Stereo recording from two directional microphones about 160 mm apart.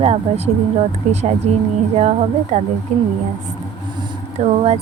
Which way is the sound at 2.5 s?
50° right (ahead or behind).